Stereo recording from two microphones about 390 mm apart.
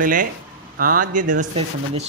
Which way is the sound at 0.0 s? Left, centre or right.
Right.